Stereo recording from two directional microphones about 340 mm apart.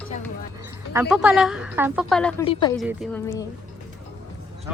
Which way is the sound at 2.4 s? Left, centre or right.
Centre.